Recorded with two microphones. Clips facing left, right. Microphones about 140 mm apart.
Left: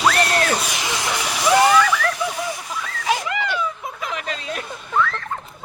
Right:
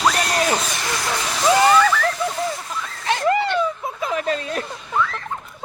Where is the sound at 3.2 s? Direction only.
40° right (ahead or behind).